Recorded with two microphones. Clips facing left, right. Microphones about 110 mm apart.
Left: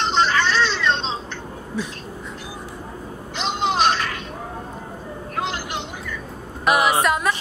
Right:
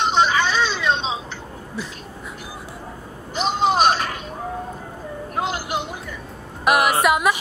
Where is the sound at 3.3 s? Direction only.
45° right (ahead or behind).